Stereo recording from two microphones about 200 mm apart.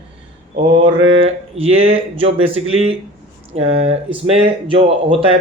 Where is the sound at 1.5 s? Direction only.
30° right (ahead or behind).